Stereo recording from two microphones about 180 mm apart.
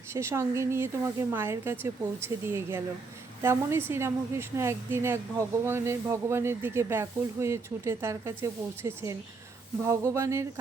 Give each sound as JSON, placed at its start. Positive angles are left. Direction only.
{"t": 0.1, "sound": "a woman's voice", "side_deg": -15}